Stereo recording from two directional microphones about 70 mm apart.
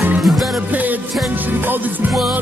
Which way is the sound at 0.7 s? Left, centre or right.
Right.